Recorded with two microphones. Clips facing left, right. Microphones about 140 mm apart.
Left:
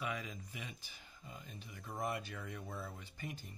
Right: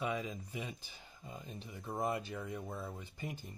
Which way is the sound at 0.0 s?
25° right (ahead or behind).